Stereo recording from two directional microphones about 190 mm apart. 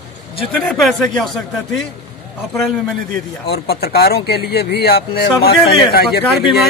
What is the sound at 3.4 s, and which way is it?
Speech, 55° left (ahead or behind).